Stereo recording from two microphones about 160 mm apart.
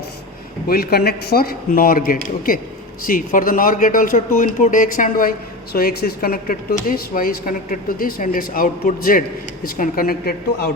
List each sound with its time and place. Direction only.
0.7 s a man's voice: 75° left (ahead or behind); by 5.3 s 60° left (ahead or behind)
5.7 s a man's voice: 75° left (ahead or behind)